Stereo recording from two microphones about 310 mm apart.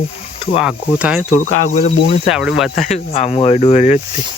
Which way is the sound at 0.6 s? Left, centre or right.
Centre.